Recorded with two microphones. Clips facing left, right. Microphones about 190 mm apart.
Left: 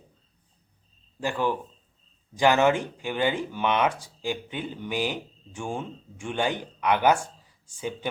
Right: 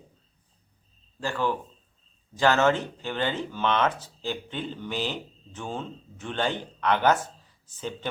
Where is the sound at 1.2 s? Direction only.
15° left (ahead or behind).